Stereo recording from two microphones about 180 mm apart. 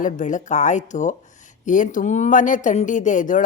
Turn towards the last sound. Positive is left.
turn(degrees=45)  # may be behind; listen again after turning